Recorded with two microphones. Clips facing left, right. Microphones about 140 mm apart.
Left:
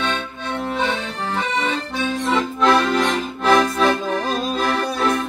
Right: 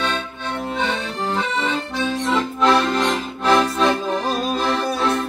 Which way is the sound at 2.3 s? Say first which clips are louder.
Even; centre (ahead or behind).